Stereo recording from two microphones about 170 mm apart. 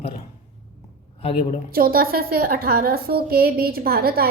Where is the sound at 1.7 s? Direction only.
60° right (ahead or behind).